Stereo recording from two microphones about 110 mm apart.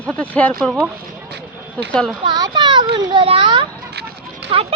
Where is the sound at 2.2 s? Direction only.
45° right (ahead or behind).